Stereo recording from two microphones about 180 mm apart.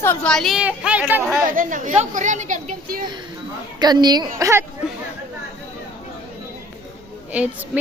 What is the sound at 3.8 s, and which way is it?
Speech, 25° right (ahead or behind).